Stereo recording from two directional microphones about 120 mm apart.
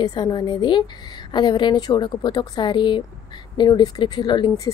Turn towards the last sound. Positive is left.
turn(degrees=40)  # may be behind; listen again after turning